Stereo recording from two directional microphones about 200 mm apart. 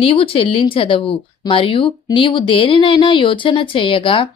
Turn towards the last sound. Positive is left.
turn(degrees=25)  # may be behind; listen again after turning